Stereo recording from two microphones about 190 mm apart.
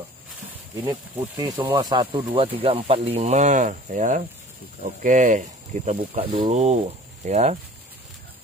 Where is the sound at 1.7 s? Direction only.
25° right (ahead or behind).